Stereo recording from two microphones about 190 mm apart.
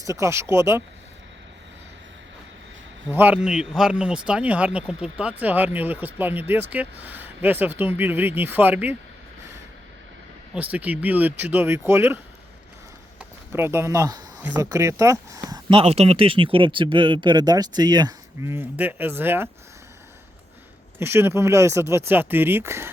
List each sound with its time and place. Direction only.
0.0 s speech: 15° right (ahead or behind)
3.1 s speech: 10° right (ahead or behind)
10.5 s speech: 5° right (ahead or behind)
21.0 s speech: 10° right (ahead or behind)